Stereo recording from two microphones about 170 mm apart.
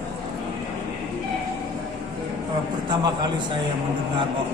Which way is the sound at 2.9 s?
25° right (ahead or behind).